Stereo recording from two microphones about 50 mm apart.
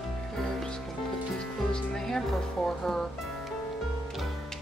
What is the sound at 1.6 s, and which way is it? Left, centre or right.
Music, centre.